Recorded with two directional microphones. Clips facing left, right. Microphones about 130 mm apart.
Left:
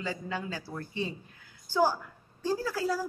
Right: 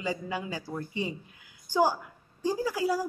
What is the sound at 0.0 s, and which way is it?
A woman's voice, 15° right (ahead or behind).